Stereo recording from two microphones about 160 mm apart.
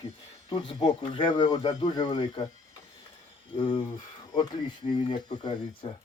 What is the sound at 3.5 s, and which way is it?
Speech, 30° left (ahead or behind).